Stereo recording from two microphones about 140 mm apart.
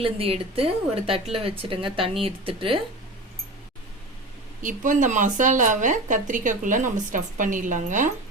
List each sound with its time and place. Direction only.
0.0 s speech: 45° right (ahead or behind)
4.6 s speech: 65° right (ahead or behind)